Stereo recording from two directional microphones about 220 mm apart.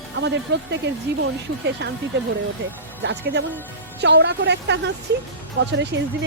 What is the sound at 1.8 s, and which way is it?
Speech, 50° right (ahead or behind).